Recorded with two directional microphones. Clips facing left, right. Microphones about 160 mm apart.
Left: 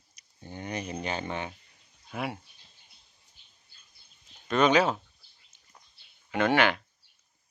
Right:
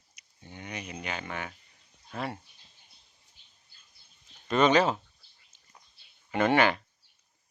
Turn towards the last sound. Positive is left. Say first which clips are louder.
# even
turn(degrees=0)  # may be behind; listen again after turning